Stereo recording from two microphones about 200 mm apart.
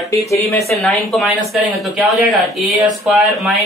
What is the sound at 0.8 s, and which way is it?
Speech, centre (ahead or behind).